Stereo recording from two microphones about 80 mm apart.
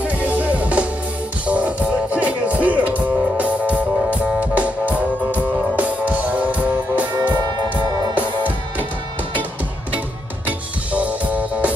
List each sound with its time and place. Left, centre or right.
0.3 s music: centre
2.1 s music: centre
10.9 s music: centre